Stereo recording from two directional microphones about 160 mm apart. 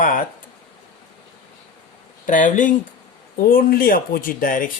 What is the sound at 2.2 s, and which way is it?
Speech, 55° left (ahead or behind).